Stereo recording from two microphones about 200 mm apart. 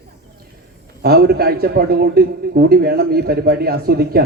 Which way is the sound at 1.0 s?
50° right (ahead or behind).